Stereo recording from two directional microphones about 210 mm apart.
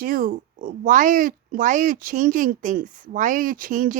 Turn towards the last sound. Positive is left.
turn(degrees=-40)  # may be behind; listen again after turning